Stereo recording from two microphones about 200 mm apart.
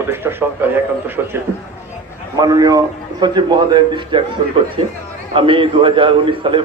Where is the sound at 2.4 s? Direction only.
20° right (ahead or behind).